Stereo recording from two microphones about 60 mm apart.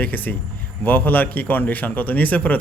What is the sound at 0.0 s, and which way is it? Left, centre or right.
A man's voice, left.